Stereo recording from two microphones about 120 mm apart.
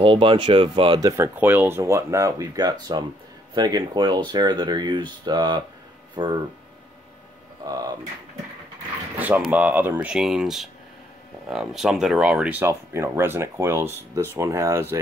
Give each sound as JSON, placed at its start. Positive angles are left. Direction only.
{"t": 0.0, "sound": "speech", "side_deg": -45}
{"t": 1.0, "sound": "speech", "side_deg": -20}
{"t": 7.6, "sound": "speech", "side_deg": -30}
{"t": 9.5, "sound": "speech", "side_deg": -15}